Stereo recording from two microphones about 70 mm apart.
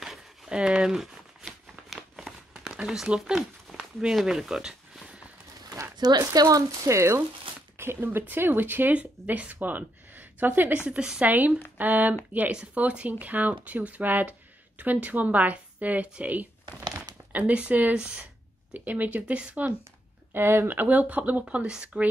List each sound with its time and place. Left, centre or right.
0.0 s crumpling: centre
3.2 s speech: centre
5.9 s speech: right
6.9 s speech: right; by 11.3 s centre
11.8 s speech: right
20.3 s speech: right; by 22.0 s centre